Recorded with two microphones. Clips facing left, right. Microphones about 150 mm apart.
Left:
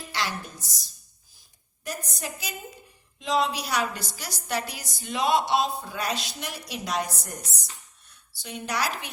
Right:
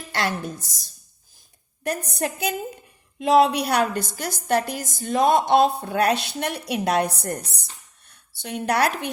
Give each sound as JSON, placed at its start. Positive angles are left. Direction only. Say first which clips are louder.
{"t": 0.1, "sound": "a woman's voice", "louder": "right 6 dB", "side_deg": -55}